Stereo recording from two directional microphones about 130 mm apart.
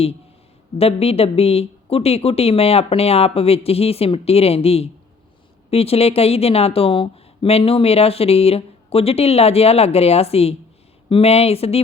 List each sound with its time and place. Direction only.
0.8 s a woman's voice: 50° left (ahead or behind)